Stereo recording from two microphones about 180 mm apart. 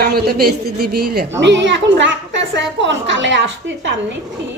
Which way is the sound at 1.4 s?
80° right.